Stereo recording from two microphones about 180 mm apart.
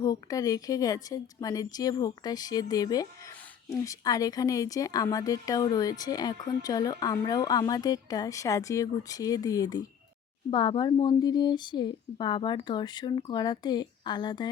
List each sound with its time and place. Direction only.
0.0 s speech: 20° left (ahead or behind)